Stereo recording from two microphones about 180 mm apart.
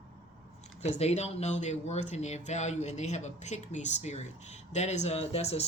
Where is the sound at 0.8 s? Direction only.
35° left (ahead or behind).